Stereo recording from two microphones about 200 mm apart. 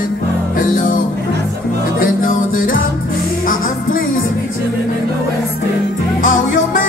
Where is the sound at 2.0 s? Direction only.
45° left (ahead or behind).